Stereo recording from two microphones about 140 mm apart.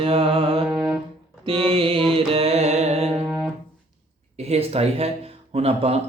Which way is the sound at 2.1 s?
45° right (ahead or behind).